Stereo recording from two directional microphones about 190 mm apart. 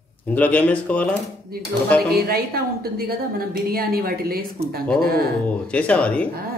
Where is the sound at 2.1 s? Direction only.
55° right (ahead or behind).